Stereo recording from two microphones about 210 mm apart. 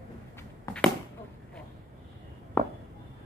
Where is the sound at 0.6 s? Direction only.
5° left (ahead or behind).